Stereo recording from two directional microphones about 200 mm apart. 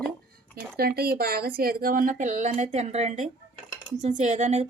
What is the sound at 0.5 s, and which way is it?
A woman's voice, 50° right (ahead or behind).